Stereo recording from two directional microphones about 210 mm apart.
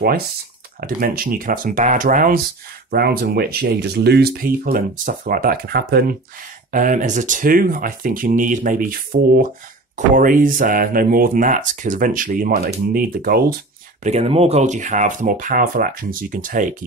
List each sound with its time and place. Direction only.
0.7 s speech: 45° right (ahead or behind)
14.0 s speech: 30° right (ahead or behind)